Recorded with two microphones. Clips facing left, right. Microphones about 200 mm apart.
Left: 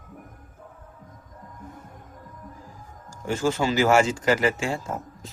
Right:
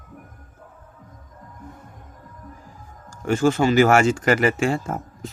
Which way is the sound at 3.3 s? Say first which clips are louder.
Right 6 dB; 60° right (ahead or behind).